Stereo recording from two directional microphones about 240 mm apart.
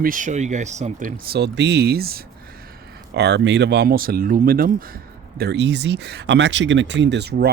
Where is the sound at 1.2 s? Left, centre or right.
Right.